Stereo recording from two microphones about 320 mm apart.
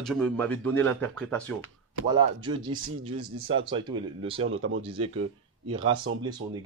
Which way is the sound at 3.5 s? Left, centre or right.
Centre.